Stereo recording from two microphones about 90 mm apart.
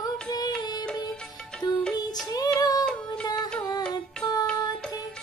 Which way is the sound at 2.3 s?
45° left (ahead or behind).